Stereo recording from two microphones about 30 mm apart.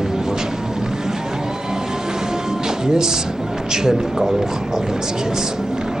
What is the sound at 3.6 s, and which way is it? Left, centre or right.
Speech, centre.